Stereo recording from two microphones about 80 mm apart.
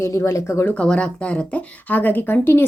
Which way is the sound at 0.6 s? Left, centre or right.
Centre.